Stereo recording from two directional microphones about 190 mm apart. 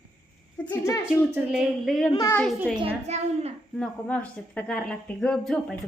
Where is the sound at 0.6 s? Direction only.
15° left (ahead or behind).